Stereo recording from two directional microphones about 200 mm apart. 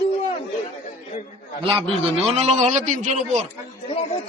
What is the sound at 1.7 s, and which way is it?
A man's voice, 25° right (ahead or behind).